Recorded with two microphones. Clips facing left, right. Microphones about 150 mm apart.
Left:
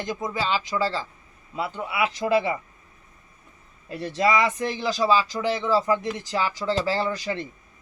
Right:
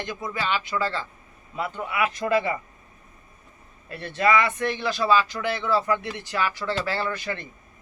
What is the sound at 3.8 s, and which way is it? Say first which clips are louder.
Speech: even; 15° left (ahead or behind).